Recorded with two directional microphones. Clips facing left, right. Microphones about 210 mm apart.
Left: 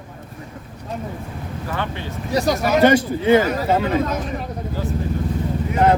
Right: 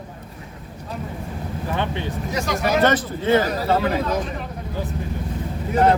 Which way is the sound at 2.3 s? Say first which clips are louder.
Left 7 dB; 35° left (ahead or behind).